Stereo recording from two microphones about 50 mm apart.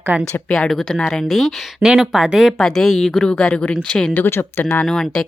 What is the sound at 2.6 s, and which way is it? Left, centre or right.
A woman's voice, centre.